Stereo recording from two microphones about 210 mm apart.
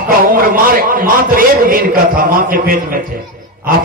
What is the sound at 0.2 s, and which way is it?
A man's voice, 40° right (ahead or behind).